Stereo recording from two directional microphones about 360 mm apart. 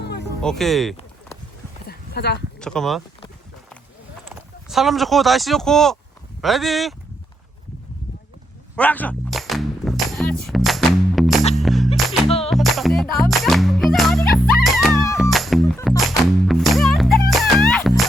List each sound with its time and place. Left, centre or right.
0.4 s speech: centre
1.9 s a sound: left
2.6 s speech: centre
4.3 s speech: centre
8.7 s music: centre